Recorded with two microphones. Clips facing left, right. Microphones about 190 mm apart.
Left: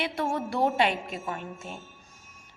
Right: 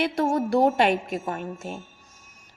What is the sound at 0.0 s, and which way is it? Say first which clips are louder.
A woman's voice: right 6 dB; 40° right (ahead or behind).